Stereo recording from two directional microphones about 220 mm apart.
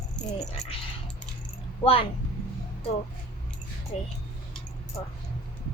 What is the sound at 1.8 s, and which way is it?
Speech, 25° left (ahead or behind).